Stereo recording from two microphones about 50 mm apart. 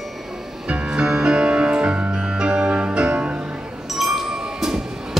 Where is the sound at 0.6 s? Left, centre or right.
Centre.